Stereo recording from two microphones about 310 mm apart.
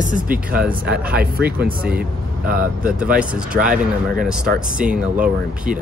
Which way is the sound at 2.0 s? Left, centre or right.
Right.